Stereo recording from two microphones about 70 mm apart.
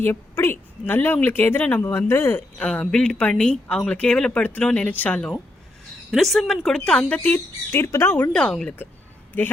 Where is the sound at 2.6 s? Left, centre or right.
Centre.